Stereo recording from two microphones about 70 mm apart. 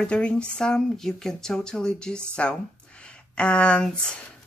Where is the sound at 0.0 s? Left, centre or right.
Centre.